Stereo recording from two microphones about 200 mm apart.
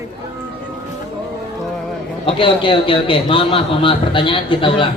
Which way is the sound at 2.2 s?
25° left (ahead or behind).